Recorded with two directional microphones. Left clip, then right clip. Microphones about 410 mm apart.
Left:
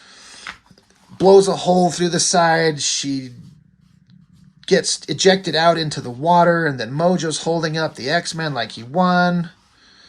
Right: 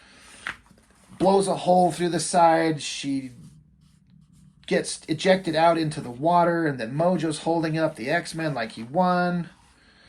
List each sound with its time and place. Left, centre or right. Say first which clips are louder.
0.0 s a sound: left 7 dB; centre
1.2 s speech: left 9 dB; centre
4.6 s speech: left 8 dB; centre